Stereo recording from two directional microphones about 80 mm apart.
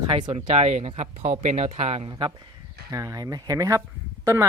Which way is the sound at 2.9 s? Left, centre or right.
Right.